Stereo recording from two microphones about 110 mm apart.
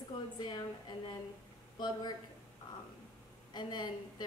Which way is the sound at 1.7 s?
40° left (ahead or behind).